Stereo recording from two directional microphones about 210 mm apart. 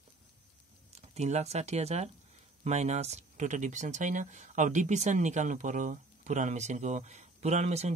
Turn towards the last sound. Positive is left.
turn(degrees=-30)  # may be behind; listen again after turning